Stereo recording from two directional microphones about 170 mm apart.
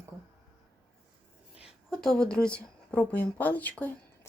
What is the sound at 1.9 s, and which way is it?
Speech, 5° left (ahead or behind).